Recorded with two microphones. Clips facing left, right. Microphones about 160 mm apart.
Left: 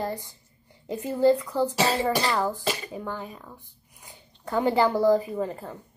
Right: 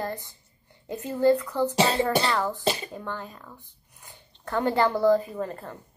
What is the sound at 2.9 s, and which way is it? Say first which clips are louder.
Speech: left 1 dB; 10° left (ahead or behind).